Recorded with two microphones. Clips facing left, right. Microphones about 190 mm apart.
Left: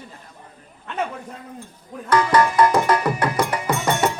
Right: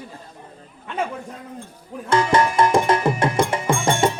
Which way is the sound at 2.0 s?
25° right (ahead or behind).